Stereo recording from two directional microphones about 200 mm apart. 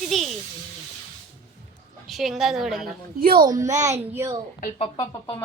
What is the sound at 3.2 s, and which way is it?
Speech, 45° right (ahead or behind).